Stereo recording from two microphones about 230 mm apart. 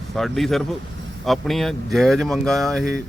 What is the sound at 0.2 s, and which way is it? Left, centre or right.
Speech, centre.